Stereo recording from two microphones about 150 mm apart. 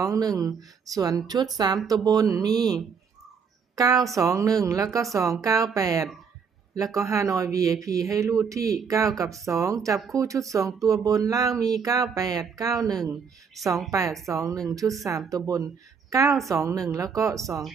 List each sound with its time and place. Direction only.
0.0 s speech: 25° right (ahead or behind)